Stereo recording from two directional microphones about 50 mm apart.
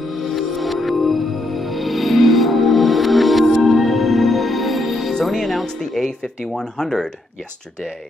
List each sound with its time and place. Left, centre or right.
0.1 s music: centre
5.2 s speech: centre